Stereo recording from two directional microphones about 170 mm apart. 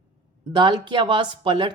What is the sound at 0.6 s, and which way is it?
Speech, 25° right (ahead or behind).